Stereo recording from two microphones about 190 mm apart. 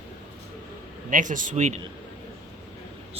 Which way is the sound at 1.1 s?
45° right (ahead or behind).